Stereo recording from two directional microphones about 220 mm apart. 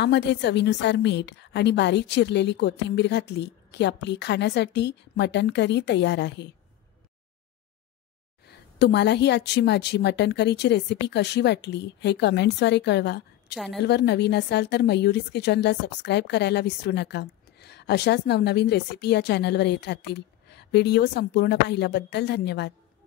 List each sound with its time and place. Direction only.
0.0 s a woman's voice: 50° left (ahead or behind)
8.5 s a woman's voice: 50° left (ahead or behind)